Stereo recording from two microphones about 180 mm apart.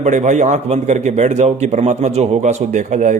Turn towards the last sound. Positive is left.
turn(degrees=-45)  # may be behind; listen again after turning